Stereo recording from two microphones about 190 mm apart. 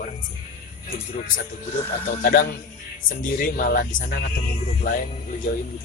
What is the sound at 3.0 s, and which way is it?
Speech, 45° left (ahead or behind).